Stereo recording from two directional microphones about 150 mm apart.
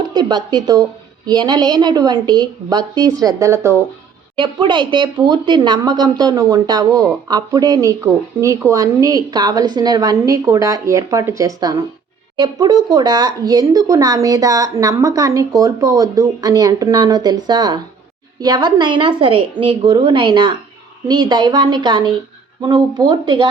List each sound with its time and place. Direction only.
0.1 s speech: 30° right (ahead or behind)
4.4 s a woman's voice: 30° right (ahead or behind)